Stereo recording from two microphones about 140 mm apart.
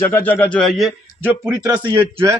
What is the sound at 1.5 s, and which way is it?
Speech, 30° right (ahead or behind).